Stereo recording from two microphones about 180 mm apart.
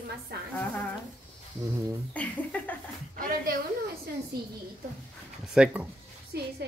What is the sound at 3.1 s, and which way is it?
Speech, 50° right (ahead or behind).